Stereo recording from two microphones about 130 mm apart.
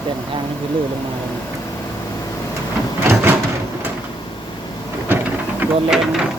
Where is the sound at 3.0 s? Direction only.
20° right (ahead or behind).